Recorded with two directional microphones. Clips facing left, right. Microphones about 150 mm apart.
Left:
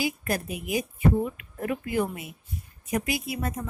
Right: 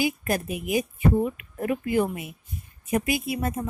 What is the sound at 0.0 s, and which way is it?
A woman's voice, 20° right (ahead or behind).